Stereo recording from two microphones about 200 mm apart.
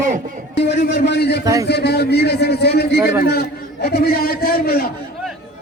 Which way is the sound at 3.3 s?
50° left (ahead or behind).